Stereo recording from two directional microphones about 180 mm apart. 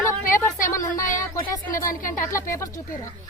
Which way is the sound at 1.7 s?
50° left (ahead or behind).